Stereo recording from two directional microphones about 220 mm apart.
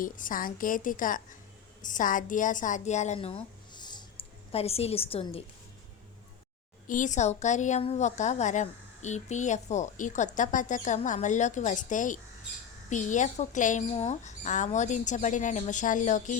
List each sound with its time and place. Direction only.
0.0 s a woman's voice: 40° left (ahead or behind)
6.8 s a woman's voice: 35° left (ahead or behind)